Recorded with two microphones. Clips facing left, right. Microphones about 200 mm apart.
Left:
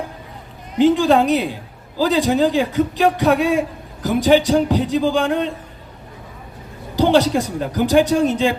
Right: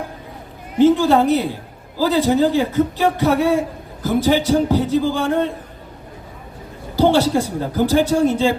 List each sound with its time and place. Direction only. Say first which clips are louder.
0.8 s speech: right 1 dB; 15° left (ahead or behind)
6.9 s speech: even; 15° left (ahead or behind)